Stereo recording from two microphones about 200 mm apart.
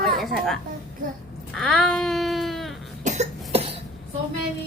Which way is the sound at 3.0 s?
35° right (ahead or behind).